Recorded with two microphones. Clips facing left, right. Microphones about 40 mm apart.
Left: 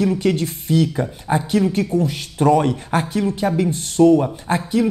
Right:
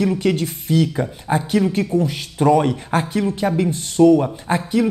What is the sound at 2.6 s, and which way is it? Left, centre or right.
Speech, right.